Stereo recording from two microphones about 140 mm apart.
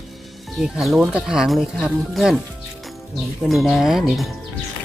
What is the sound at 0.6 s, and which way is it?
Speech, 5° right (ahead or behind).